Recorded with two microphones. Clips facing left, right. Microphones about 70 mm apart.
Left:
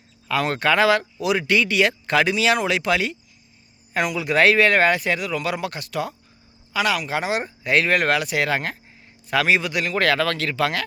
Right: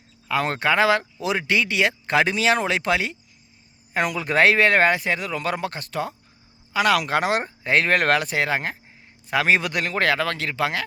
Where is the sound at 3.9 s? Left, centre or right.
Right.